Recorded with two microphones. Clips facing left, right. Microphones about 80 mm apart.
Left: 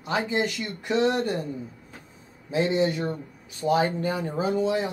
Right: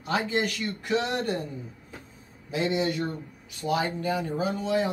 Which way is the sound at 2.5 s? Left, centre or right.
Left.